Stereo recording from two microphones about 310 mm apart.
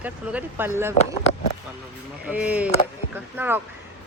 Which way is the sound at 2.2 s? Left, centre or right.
Centre.